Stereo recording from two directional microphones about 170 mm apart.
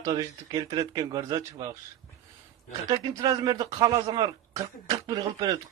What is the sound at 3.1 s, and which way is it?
Speech, 25° right (ahead or behind).